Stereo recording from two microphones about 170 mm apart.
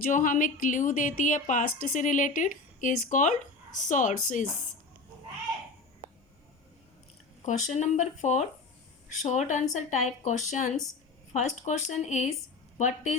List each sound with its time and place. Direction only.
0.0 s a woman's voice: 50° left (ahead or behind)
7.4 s a woman's voice: 45° left (ahead or behind)